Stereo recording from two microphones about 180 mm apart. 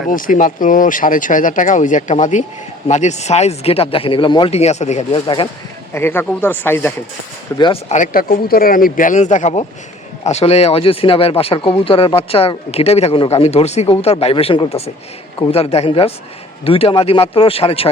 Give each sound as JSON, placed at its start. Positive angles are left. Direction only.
{"t": 0.1, "sound": "speech", "side_deg": 50}
{"t": 5.9, "sound": "speech", "side_deg": 10}
{"t": 7.6, "sound": "speech", "side_deg": 35}